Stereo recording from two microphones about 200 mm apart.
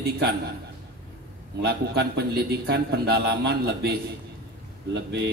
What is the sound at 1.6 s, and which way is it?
A man's voice, 55° right (ahead or behind).